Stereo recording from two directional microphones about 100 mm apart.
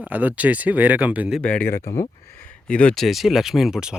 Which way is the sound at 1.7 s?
30° left (ahead or behind).